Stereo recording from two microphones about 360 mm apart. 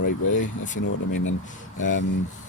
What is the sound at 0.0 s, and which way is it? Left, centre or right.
Speech, left.